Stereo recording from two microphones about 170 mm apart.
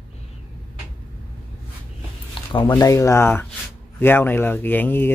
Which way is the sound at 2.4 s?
30° left (ahead or behind).